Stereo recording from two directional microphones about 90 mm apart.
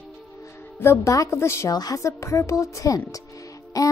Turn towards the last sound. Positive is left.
turn(degrees=45)  # may be behind; listen again after turning